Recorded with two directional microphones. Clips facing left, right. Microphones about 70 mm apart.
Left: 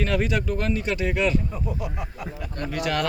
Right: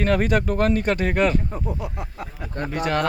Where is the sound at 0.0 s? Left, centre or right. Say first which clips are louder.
Right 4 dB; right.